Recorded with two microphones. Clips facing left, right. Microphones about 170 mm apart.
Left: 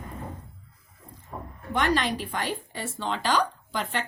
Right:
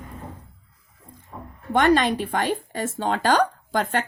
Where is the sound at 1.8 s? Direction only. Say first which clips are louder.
Right 7 dB; 55° right (ahead or behind).